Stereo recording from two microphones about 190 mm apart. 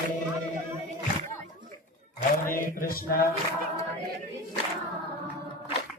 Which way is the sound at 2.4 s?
50° left (ahead or behind).